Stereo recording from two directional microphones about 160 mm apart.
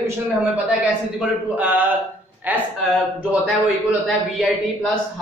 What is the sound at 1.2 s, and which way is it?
A man's voice, 10° right (ahead or behind).